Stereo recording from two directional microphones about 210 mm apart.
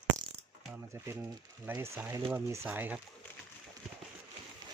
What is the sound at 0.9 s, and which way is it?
Speech, 10° right (ahead or behind).